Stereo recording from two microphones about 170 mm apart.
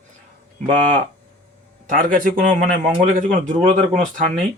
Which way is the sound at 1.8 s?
55° right (ahead or behind).